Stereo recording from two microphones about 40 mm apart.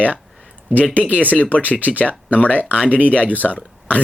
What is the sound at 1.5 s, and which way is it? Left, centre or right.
Speech, left.